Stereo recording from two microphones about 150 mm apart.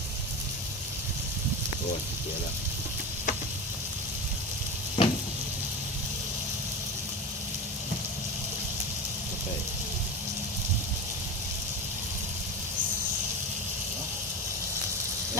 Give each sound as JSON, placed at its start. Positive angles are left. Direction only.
{"t": 5.0, "sound": "sizzle", "side_deg": 35}